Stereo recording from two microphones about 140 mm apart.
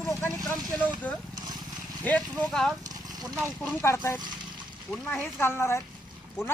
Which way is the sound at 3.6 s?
15° left (ahead or behind).